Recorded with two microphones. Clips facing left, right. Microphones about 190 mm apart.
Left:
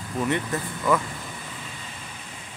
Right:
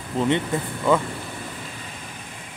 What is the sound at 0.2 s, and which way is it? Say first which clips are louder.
Speech: right 4 dB; 25° right (ahead or behind).